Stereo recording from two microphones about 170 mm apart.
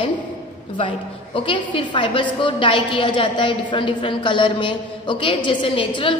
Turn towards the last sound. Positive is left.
turn(degrees=30)  # may be behind; listen again after turning